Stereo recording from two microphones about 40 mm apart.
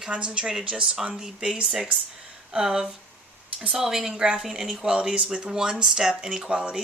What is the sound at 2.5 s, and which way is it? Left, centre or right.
Speech, centre.